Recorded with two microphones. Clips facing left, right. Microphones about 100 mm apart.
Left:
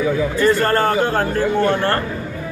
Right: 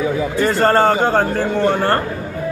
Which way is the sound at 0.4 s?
20° right (ahead or behind).